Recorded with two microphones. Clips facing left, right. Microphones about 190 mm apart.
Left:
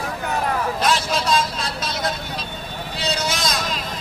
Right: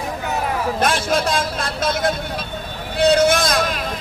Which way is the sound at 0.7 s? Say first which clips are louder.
Right 2 dB; 55° right (ahead or behind).